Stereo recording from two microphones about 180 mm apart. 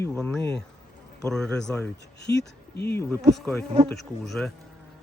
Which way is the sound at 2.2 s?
70° left (ahead or behind).